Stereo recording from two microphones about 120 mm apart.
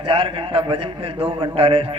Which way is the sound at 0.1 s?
50° right (ahead or behind).